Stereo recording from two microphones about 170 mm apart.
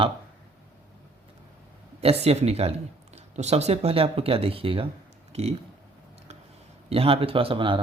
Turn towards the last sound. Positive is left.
turn(degrees=-30)  # may be behind; listen again after turning